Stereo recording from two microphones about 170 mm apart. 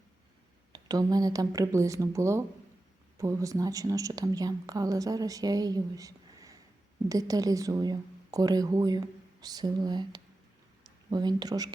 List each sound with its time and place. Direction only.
0.7 s a woman's voice: 20° right (ahead or behind)